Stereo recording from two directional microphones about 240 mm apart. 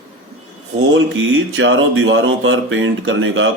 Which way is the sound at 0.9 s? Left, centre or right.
Right.